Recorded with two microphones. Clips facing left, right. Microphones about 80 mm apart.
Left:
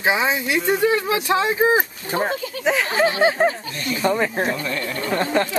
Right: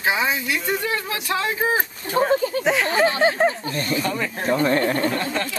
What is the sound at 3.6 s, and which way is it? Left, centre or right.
Speech, right.